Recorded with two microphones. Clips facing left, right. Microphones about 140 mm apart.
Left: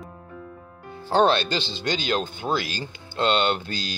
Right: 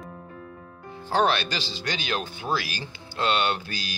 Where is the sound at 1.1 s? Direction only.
30° left (ahead or behind).